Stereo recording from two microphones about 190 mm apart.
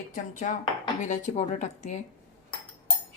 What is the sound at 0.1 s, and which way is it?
Speech, 40° left (ahead or behind).